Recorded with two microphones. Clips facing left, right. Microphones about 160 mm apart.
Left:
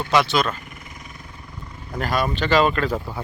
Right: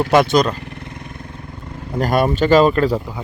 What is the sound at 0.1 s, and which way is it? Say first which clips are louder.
Speech: right 4 dB; 50° right (ahead or behind).